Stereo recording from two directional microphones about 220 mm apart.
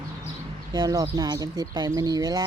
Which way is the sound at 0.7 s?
15° right (ahead or behind).